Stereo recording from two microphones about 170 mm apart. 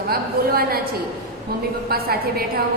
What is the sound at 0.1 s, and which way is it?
A woman's voice, 65° right (ahead or behind).